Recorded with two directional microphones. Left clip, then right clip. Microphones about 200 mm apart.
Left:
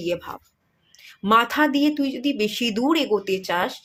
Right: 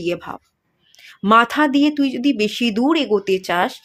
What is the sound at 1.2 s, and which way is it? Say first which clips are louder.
Speech: right 4 dB; 25° right (ahead or behind).